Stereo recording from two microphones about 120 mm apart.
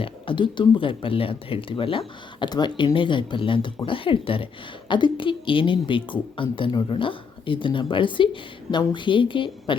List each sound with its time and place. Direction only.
0.0 s speech: 45° left (ahead or behind)